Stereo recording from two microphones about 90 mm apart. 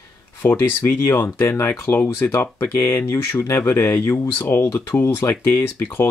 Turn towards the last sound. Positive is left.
turn(degrees=25)  # may be behind; listen again after turning